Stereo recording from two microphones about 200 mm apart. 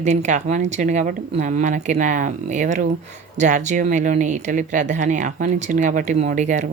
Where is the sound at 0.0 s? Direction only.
35° right (ahead or behind).